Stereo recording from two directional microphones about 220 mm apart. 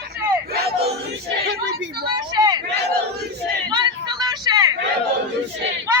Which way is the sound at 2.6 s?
50° right (ahead or behind).